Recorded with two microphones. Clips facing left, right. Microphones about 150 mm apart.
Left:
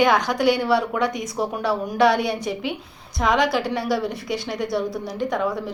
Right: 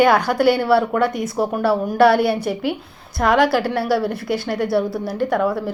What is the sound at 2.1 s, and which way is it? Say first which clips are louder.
Speech: right 5 dB; 60° right (ahead or behind).